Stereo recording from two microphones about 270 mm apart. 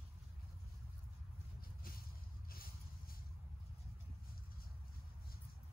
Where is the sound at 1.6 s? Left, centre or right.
Left.